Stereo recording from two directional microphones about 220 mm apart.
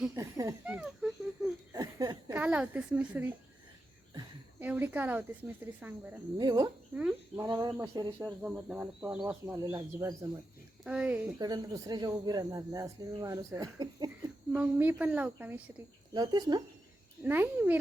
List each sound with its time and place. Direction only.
0.0 s speech: 10° right (ahead or behind)
0.6 s a sound: 5° right (ahead or behind)
1.7 s a sound: 15° right (ahead or behind)
2.3 s speech: 5° right (ahead or behind)
4.6 s speech: 5° right (ahead or behind)
11.3 s speech: 15° right (ahead or behind)
16.1 s speech: 20° right (ahead or behind)